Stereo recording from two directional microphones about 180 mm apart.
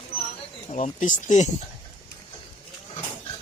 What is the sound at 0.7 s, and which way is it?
Speech, 45° left (ahead or behind).